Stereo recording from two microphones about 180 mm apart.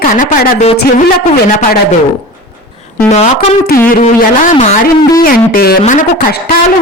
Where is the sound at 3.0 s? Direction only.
35° left (ahead or behind).